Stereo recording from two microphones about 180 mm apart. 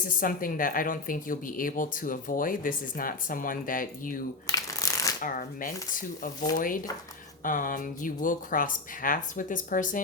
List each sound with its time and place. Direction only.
0.2 s speech: 50° left (ahead or behind)
4.4 s shuffling cards: 20° left (ahead or behind)
5.2 s speech: 50° left (ahead or behind)